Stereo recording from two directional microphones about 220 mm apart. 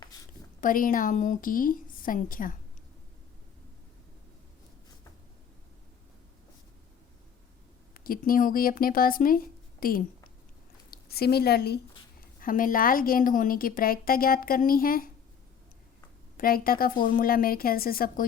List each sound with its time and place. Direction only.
0.6 s a woman's voice: 40° left (ahead or behind)
7.9 s a woman's voice: 40° left (ahead or behind)
16.4 s a woman's voice: 40° left (ahead or behind)